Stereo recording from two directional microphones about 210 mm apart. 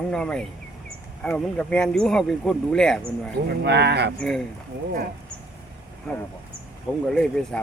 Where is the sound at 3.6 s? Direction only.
55° right (ahead or behind).